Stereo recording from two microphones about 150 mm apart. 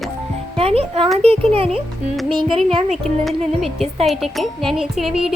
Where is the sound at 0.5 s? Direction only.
40° right (ahead or behind).